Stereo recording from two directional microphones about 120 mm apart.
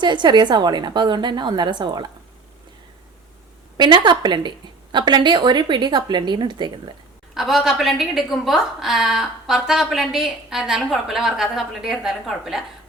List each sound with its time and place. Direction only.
0.0 s a woman's voice: 40° right (ahead or behind)
3.8 s a woman's voice: 40° right (ahead or behind)
7.3 s a woman's voice: centre (ahead or behind)